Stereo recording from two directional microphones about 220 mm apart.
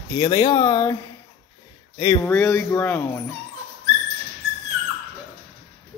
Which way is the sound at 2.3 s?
10° left (ahead or behind).